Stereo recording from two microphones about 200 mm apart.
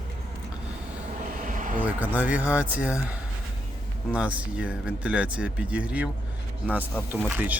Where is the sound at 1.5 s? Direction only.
40° right (ahead or behind).